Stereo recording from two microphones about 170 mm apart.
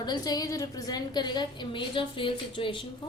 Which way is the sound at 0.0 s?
25° left (ahead or behind).